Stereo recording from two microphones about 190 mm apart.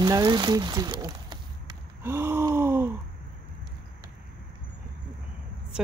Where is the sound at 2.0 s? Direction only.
15° right (ahead or behind).